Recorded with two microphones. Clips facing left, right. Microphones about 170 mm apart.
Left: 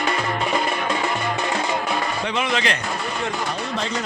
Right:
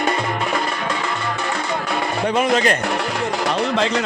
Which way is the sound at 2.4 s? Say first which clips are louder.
Right 6 dB; 45° right (ahead or behind).